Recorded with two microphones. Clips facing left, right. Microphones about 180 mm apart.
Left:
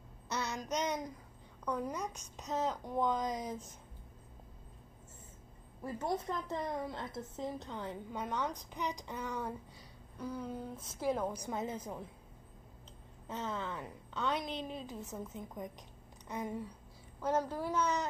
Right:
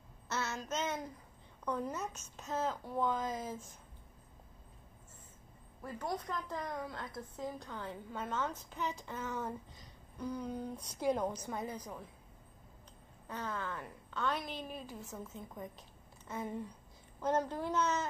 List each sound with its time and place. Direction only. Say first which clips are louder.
0.3 s child singing: left 1 dB; 15° left (ahead or behind)
1.7 s a woman's voice: left 1 dB; 10° left (ahead or behind)
5.8 s a woman's voice: left 3 dB; 25° left (ahead or behind); by 11.4 s 5° left (ahead or behind)
11.4 s a woman's voice: left 2 dB; 20° left (ahead or behind)
13.3 s a woman's voice: left 1 dB; 20° left (ahead or behind)